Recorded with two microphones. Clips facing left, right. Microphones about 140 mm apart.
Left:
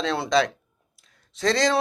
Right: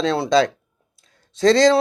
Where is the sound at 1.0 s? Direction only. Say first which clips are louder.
Right 8 dB; 30° right (ahead or behind).